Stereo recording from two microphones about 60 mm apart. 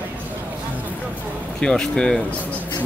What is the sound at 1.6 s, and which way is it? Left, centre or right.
Speech, centre.